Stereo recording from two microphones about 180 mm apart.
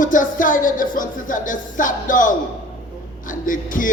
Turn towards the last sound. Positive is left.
turn(degrees=45)  # may be behind; listen again after turning